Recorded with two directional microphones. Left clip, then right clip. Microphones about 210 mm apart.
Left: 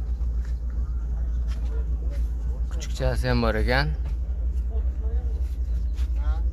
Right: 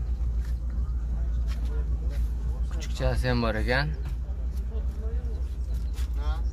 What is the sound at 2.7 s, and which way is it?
Speech, 15° left (ahead or behind).